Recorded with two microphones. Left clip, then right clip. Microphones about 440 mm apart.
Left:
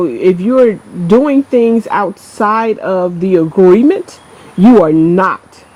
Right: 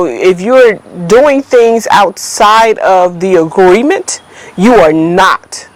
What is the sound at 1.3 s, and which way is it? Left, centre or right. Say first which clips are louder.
Speech: right 4 dB; right.